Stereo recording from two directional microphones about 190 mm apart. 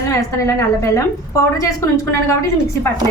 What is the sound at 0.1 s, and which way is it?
A woman's voice, 15° left (ahead or behind).